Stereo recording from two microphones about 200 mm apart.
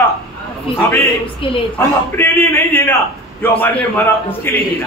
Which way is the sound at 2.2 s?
10° left (ahead or behind).